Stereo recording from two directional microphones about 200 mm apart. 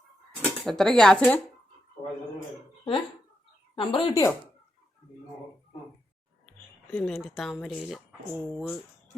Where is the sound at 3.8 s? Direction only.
25° left (ahead or behind).